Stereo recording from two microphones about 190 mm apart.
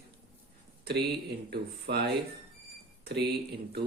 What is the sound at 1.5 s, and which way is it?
Speech, 55° right (ahead or behind).